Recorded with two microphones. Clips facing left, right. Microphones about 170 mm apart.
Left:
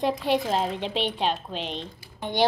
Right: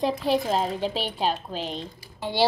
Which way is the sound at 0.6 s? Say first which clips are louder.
Even; 40° right (ahead or behind).